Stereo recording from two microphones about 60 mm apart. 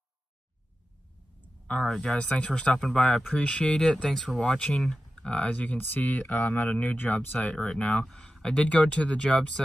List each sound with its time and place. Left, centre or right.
1.7 s speech: centre
5.9 s speech: left
7.0 s speech: left
8.0 s speech: centre